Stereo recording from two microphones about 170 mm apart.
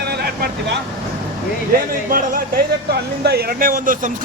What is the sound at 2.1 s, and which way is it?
Speech, 55° right (ahead or behind).